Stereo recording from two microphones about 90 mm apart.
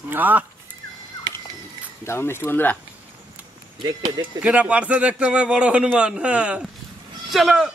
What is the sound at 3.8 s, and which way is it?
Speech, 50° right (ahead or behind).